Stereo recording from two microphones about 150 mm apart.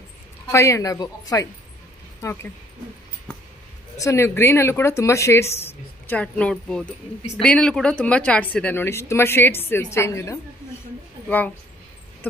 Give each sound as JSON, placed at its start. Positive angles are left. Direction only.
{"t": 0.5, "sound": "speech", "side_deg": 20}
{"t": 4.0, "sound": "speech", "side_deg": 15}